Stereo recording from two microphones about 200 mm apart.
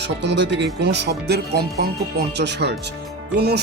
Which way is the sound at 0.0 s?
60° right (ahead or behind).